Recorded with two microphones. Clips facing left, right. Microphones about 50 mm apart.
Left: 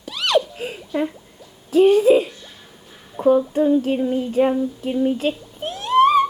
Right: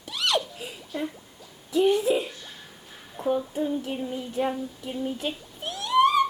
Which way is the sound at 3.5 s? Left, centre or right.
Left.